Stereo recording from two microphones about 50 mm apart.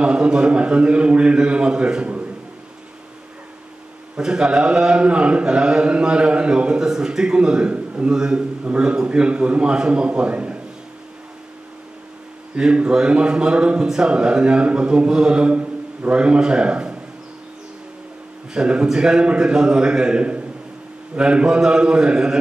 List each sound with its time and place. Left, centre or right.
0.0 s a man's voice: centre
4.2 s a man's voice: centre
8.1 s a man's voice: centre
12.5 s a man's voice: centre
18.5 s a man's voice: centre